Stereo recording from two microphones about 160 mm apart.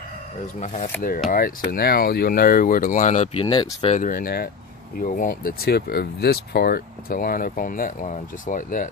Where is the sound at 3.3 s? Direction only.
30° left (ahead or behind).